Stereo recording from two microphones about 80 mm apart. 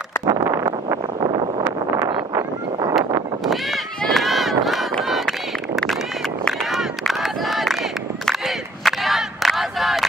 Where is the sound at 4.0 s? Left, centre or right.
Centre.